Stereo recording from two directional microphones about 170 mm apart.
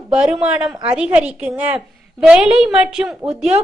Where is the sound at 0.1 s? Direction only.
5° right (ahead or behind).